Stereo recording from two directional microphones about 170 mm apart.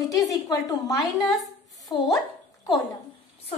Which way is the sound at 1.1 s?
Centre (ahead or behind).